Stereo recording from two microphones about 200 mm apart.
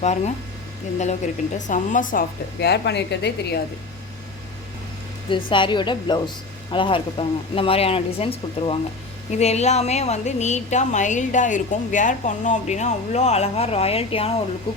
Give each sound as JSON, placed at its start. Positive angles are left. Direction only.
{"t": 0.0, "sound": "a woman's voice", "side_deg": 35}
{"t": 1.5, "sound": "a woman's voice", "side_deg": 40}
{"t": 5.5, "sound": "a woman's voice", "side_deg": 25}